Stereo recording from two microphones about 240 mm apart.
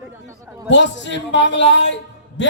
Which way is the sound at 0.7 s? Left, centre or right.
Left.